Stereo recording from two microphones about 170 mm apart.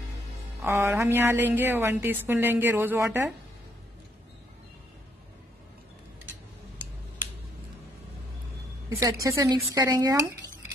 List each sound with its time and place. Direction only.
0.7 s a woman's voice: 15° right (ahead or behind)
8.8 s speech: 20° right (ahead or behind)